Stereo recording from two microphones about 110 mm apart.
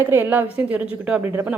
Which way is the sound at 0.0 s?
20° right (ahead or behind).